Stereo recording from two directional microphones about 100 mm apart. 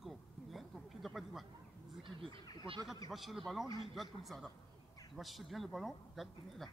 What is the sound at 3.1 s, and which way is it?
A man's voice, centre (ahead or behind).